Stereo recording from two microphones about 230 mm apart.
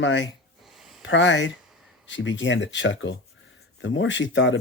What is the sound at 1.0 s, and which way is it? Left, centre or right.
Speech, left.